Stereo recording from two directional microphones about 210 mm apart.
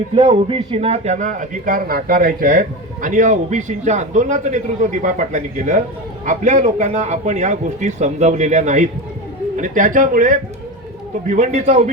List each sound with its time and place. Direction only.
0.1 s a man's voice: 30° right (ahead or behind)